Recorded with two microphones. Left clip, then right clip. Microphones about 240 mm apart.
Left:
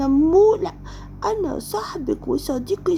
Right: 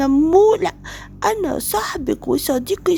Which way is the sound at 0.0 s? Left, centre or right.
Right.